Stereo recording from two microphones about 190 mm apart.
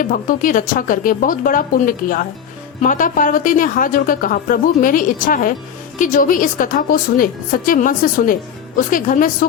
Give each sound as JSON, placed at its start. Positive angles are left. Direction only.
{"t": 0.0, "sound": "a woman's voice", "side_deg": 45}